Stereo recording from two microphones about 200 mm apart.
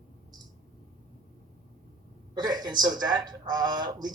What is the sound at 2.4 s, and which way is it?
Speech, 20° right (ahead or behind).